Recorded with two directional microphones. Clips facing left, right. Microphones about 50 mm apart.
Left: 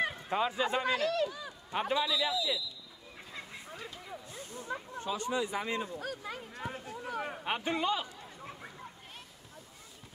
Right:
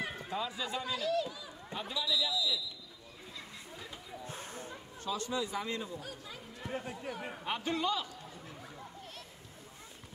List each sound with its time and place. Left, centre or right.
0.3 s a man's voice: left
0.9 s speech: left
4.3 s a sound: right
4.9 s speech: left
5.9 s speech: left
6.7 s speech: right
7.2 s speech: left